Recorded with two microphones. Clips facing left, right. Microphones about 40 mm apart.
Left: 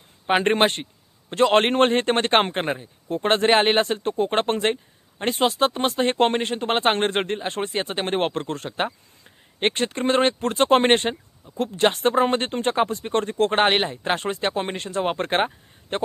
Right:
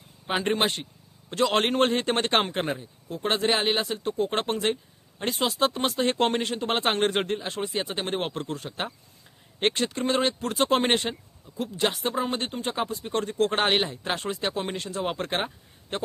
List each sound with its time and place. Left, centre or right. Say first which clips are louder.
0.3 s speech: left 6 dB; left
3.1 s speech: left 6 dB; left
8.7 s speech: left 7 dB; left
11.5 s speech: left 6 dB; left